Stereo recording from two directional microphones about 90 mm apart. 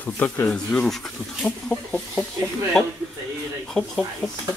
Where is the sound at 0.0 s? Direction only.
20° left (ahead or behind).